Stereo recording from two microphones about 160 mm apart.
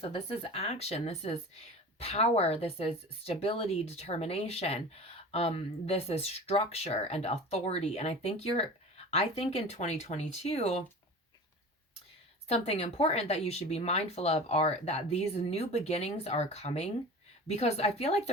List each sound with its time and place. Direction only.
0.0 s speech: 35° left (ahead or behind)
12.5 s speech: 40° left (ahead or behind)